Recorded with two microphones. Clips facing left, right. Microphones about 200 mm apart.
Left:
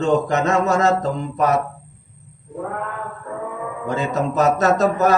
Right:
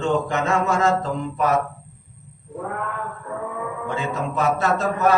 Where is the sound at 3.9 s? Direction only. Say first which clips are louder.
Left 6 dB; 40° left (ahead or behind).